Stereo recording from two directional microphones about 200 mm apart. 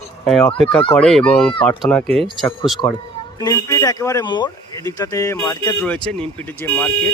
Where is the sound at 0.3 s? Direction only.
Centre (ahead or behind).